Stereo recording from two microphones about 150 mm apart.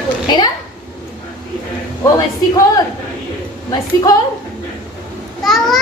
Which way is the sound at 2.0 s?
25° left (ahead or behind).